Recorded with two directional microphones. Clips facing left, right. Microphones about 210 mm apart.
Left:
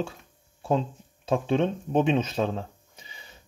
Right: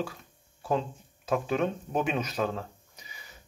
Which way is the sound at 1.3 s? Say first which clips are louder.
Left 3 dB; 30° left (ahead or behind).